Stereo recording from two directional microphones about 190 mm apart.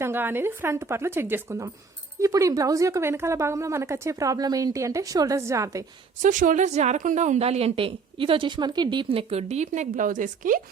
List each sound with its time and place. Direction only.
0.0 s speech: 10° right (ahead or behind)
6.2 s a woman's voice: 45° right (ahead or behind)